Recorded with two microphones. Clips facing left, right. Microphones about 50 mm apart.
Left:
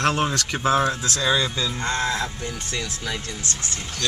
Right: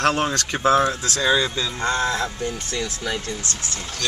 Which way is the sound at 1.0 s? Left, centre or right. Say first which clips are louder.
Right 2 dB; centre.